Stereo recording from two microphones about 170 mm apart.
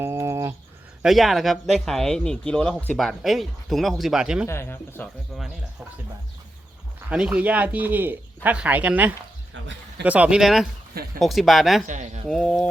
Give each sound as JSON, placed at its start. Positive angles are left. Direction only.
{"t": 0.0, "sound": "a sound", "side_deg": -15}
{"t": 1.0, "sound": "speech", "side_deg": 0}
{"t": 4.4, "sound": "speech", "side_deg": 15}
{"t": 7.1, "sound": "speech", "side_deg": -5}
{"t": 11.9, "sound": "speech", "side_deg": -45}
{"t": 12.3, "sound": "speech", "side_deg": 0}